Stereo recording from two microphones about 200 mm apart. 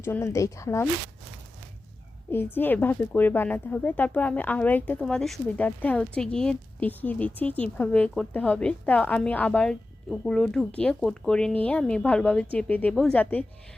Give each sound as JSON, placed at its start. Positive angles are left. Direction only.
{"t": 0.0, "sound": "a woman's voice", "side_deg": 15}
{"t": 2.3, "sound": "a woman's voice", "side_deg": 10}